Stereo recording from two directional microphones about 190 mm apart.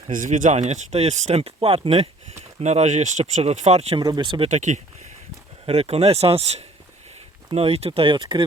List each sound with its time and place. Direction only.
0.1 s speech: 45° right (ahead or behind)
4.0 s speech: 20° right (ahead or behind)